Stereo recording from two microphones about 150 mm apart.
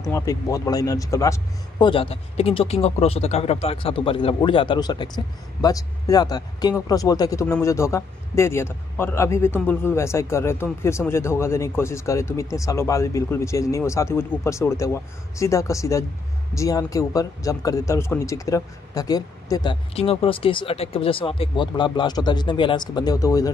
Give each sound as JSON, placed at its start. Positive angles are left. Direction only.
{"t": 0.1, "sound": "a man's voice", "side_deg": 20}
{"t": 1.9, "sound": "a man's voice", "side_deg": 40}